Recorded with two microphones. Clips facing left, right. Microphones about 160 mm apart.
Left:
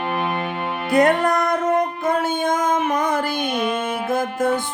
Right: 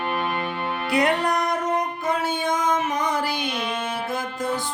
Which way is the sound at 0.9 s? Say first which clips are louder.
Left 5 dB; 45° left (ahead or behind).